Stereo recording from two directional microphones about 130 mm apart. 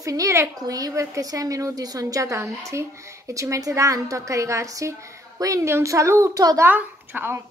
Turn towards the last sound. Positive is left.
turn(degrees=-15)  # may be behind; listen again after turning